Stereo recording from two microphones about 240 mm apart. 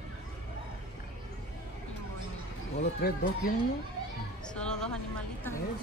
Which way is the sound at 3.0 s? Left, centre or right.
Left.